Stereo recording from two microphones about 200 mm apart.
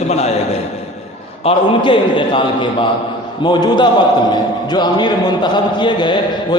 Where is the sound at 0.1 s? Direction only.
30° left (ahead or behind).